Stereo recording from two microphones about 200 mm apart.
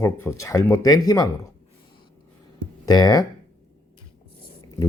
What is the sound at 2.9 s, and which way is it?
Speech, 20° left (ahead or behind).